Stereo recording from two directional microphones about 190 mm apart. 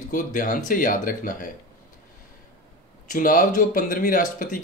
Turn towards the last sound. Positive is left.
turn(degrees=45)  # may be behind; listen again after turning